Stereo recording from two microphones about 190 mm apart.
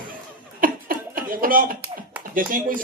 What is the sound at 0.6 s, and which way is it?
Chuckle, 45° right (ahead or behind).